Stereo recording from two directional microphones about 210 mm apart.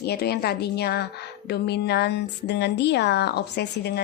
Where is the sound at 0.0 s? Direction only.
50° left (ahead or behind).